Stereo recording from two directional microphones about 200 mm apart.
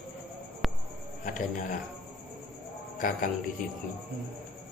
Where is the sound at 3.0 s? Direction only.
45° left (ahead or behind).